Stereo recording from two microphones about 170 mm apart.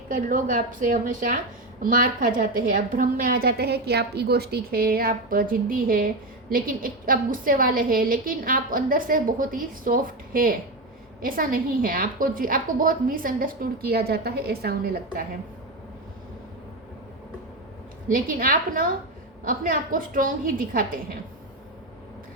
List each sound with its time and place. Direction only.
0.1 s a woman's voice: 50° right (ahead or behind)
18.1 s a woman's voice: 55° right (ahead or behind)